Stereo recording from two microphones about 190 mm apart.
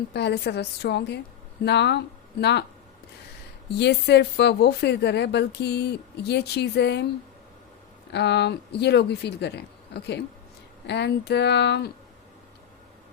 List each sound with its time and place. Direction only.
0.1 s speech: 60° left (ahead or behind)
3.8 s speech: 65° left (ahead or behind)
8.1 s speech: 65° left (ahead or behind)